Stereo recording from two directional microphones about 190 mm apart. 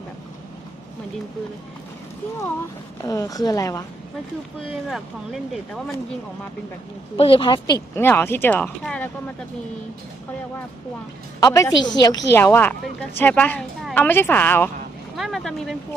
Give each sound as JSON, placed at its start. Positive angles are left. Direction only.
{"t": 3.0, "sound": "a woman's voice", "side_deg": 20}
{"t": 4.9, "sound": "speech", "side_deg": 0}
{"t": 7.2, "sound": "a woman's voice", "side_deg": 25}
{"t": 7.9, "sound": "a woman's voice", "side_deg": 10}
{"t": 11.3, "sound": "a woman's voice", "side_deg": 15}
{"t": 15.1, "sound": "speech", "side_deg": 0}